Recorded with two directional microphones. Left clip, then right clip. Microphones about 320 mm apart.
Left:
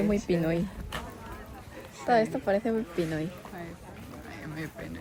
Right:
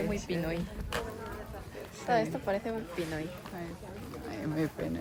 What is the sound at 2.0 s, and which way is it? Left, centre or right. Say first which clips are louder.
Speech: left 5 dB; left.